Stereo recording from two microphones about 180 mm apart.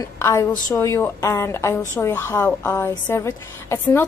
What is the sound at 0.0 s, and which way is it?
A woman's voice, 15° left (ahead or behind).